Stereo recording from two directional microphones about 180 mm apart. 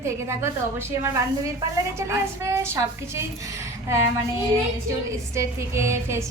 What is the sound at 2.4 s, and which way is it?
Speech, 15° right (ahead or behind).